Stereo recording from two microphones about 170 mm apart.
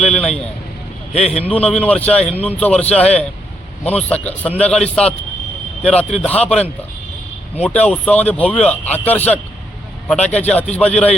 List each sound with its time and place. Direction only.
0.0 s speech: 5° left (ahead or behind)
1.1 s speech: 40° left (ahead or behind)
1.4 s a man's voice: 10° left (ahead or behind)
3.8 s a man's voice: 5° left (ahead or behind)